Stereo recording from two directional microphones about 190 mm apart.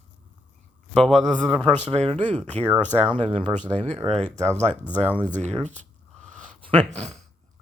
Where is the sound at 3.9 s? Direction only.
35° right (ahead or behind).